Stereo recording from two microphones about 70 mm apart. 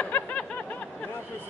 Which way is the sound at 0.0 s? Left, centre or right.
Centre.